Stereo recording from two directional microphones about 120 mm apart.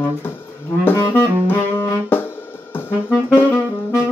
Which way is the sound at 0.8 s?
15° left (ahead or behind).